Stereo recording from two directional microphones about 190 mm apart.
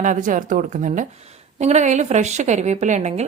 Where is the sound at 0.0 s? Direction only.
45° right (ahead or behind).